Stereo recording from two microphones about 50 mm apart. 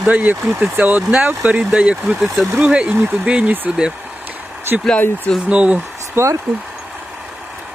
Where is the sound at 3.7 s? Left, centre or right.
Right.